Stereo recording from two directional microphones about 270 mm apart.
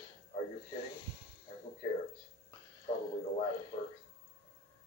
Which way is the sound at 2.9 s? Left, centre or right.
Left.